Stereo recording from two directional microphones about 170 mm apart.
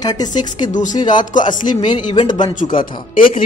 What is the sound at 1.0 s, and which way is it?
A woman's voice, 25° left (ahead or behind).